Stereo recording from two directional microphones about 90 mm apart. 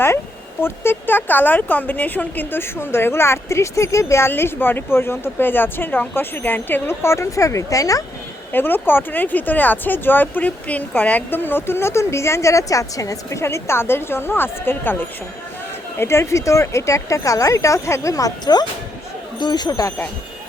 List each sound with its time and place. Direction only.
0.6 s speech: 25° left (ahead or behind)
8.5 s speech: 25° left (ahead or behind); by 19.9 s 50° left (ahead or behind)